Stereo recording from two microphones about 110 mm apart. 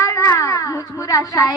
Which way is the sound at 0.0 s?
30° left (ahead or behind).